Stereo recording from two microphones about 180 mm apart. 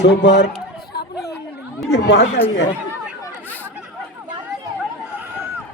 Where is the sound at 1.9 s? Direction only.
70° left (ahead or behind).